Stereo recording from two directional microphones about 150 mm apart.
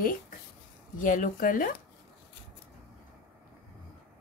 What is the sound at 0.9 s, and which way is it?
Speech, 60° left (ahead or behind).